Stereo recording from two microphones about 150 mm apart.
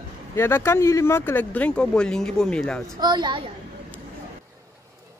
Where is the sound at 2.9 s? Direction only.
30° right (ahead or behind).